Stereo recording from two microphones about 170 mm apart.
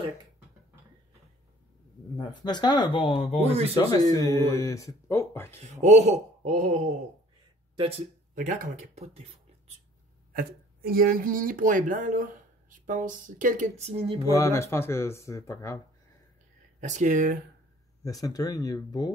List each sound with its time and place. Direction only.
2.1 s speech: 25° left (ahead or behind)
3.5 s speech: 35° right (ahead or behind)
4.1 s speech: 20° left (ahead or behind)
5.6 s speech: 40° right (ahead or behind)
7.7 s speech: 35° right (ahead or behind)
8.4 s speech: 50° right (ahead or behind)
10.3 s speech: 60° right (ahead or behind); by 14.1 s 40° right (ahead or behind)
14.3 s speech: 15° left (ahead or behind)
16.8 s speech: 45° right (ahead or behind)
18.0 s speech: 20° left (ahead or behind)